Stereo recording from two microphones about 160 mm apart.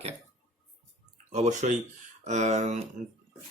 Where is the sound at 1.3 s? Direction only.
50° right (ahead or behind).